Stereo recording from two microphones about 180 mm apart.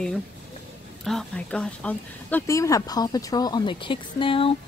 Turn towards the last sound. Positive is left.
turn(degrees=30)  # may be behind; listen again after turning